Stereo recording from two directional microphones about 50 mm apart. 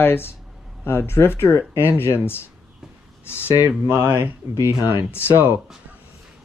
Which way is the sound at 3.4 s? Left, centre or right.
Right.